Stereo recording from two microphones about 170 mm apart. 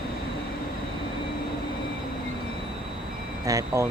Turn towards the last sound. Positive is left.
turn(degrees=-20)  # may be behind; listen again after turning